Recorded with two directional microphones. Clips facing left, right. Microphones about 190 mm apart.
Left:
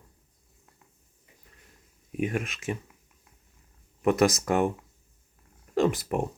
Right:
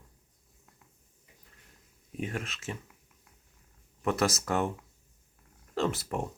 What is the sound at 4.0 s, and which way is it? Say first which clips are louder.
Speech: left 6 dB; 15° left (ahead or behind).